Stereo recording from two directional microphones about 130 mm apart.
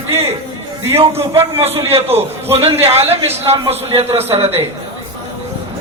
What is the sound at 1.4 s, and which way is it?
A man's voice, 50° right (ahead or behind).